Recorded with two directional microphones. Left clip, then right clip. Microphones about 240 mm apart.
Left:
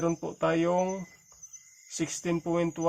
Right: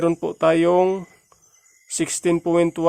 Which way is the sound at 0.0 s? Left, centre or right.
Right.